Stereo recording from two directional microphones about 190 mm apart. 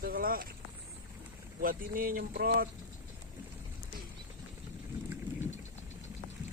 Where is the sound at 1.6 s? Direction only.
50° right (ahead or behind).